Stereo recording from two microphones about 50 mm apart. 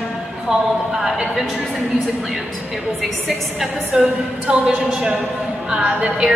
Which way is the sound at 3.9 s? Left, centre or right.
Right.